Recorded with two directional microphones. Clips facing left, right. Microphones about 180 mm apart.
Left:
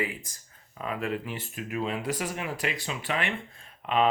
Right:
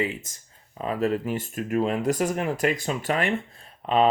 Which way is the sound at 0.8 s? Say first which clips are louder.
Right 6 dB; 35° right (ahead or behind).